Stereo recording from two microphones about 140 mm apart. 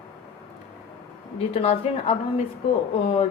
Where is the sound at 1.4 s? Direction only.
45° left (ahead or behind).